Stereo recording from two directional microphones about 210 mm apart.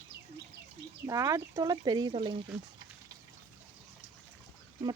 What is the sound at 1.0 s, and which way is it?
Speech, 15° right (ahead or behind).